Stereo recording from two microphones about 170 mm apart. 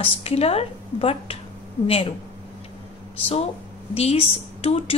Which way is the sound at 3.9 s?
35° left (ahead or behind).